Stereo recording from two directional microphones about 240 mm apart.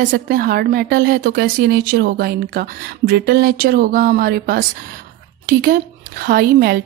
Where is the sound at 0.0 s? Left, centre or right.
Right.